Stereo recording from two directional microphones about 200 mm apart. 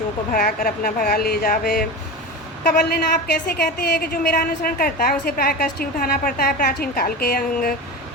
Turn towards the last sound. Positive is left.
turn(degrees=50)  # may be behind; listen again after turning